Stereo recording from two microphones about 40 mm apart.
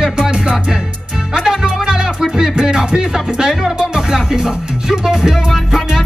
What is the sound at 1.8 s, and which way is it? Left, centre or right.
Music, centre.